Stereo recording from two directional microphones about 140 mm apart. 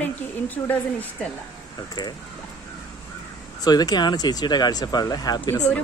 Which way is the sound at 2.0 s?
30° left (ahead or behind).